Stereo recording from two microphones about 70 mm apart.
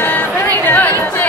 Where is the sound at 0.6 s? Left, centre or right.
Left.